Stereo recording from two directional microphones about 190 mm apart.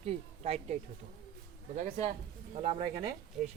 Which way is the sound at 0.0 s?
30° right (ahead or behind).